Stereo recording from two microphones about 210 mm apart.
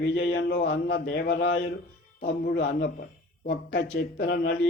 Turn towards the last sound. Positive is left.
turn(degrees=50)  # may be behind; listen again after turning